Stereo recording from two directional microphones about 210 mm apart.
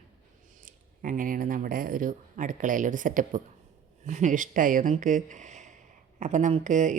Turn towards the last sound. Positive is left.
turn(degrees=-35)  # may be behind; listen again after turning